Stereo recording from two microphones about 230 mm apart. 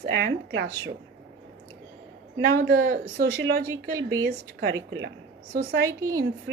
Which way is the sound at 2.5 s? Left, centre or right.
Right.